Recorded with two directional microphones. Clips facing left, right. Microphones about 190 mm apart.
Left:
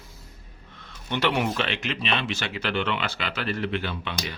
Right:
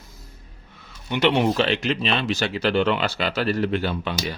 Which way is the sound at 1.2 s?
25° right (ahead or behind).